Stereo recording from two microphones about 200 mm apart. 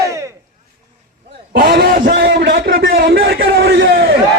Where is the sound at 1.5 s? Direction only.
45° right (ahead or behind).